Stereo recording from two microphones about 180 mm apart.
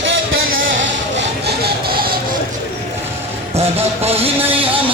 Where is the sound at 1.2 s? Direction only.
65° right (ahead or behind).